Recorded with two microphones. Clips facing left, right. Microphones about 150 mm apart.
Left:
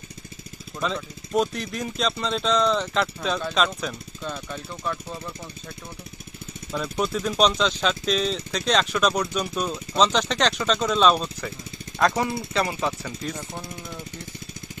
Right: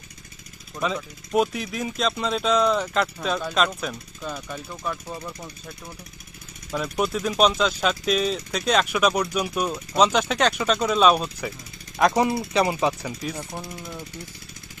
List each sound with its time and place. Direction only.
0.7 s speech: 5° right (ahead or behind)
6.7 s speech: 5° right (ahead or behind)
12.1 s speech: 20° right (ahead or behind)
13.2 s speech: 5° right (ahead or behind)